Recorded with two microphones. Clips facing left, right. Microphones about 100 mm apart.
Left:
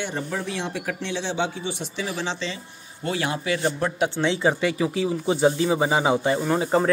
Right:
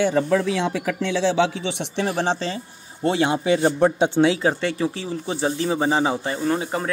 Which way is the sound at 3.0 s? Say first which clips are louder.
Right 6 dB; 25° right (ahead or behind).